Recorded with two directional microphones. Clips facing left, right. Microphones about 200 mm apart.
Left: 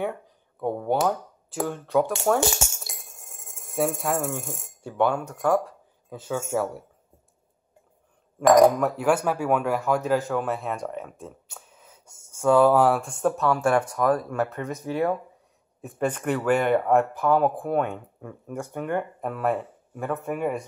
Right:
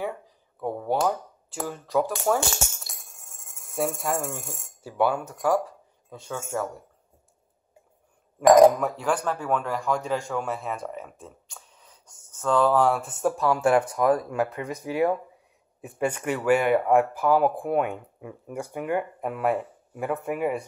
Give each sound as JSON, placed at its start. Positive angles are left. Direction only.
{"t": 0.6, "sound": "speech", "side_deg": 0}
{"t": 3.5, "sound": "speech", "side_deg": 0}
{"t": 8.7, "sound": "a man's voice", "side_deg": 5}
{"t": 13.5, "sound": "a man's voice", "side_deg": -20}